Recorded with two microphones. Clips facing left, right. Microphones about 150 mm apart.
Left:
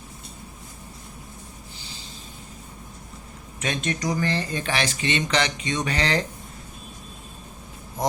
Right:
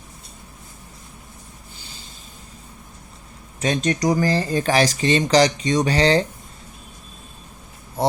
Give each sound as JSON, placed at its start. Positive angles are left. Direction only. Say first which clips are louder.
{"t": 3.6, "sound": "speech", "louder": "right 7 dB", "side_deg": -35}